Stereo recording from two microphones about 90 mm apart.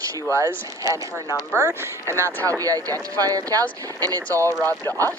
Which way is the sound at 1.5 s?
25° left (ahead or behind).